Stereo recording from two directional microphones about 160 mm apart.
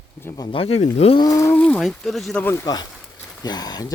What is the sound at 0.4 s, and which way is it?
Speech, 35° left (ahead or behind).